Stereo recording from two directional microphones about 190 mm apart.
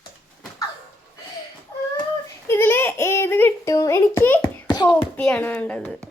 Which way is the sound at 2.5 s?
10° left (ahead or behind).